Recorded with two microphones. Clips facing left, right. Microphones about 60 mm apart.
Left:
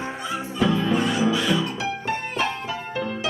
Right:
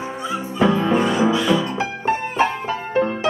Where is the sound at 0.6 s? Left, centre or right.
Right.